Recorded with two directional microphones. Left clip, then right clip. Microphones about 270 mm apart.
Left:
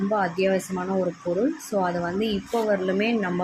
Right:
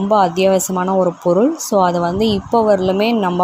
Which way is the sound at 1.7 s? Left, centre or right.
Right.